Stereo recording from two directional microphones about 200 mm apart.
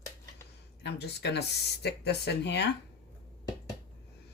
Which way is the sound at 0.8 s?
55° left (ahead or behind).